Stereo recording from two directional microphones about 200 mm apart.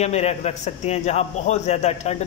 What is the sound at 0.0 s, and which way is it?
A man's voice, 35° left (ahead or behind).